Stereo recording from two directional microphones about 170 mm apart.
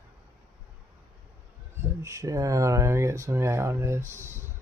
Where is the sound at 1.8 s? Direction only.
15° right (ahead or behind).